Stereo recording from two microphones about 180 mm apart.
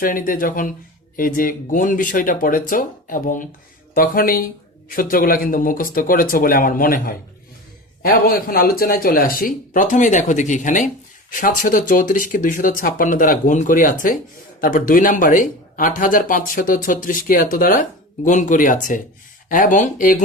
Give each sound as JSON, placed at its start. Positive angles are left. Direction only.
{"t": 0.0, "sound": "speech", "side_deg": 50}